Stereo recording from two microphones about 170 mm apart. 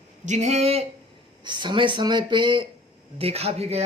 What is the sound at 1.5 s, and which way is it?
Speech, 25° right (ahead or behind).